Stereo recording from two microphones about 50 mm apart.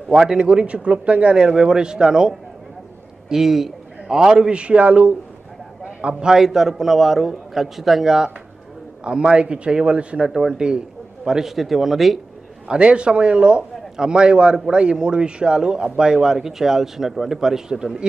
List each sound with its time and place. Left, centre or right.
0.1 s a man's voice: centre
0.4 s a man's voice: right
6.3 s a man's voice: centre
12.6 s a man's voice: right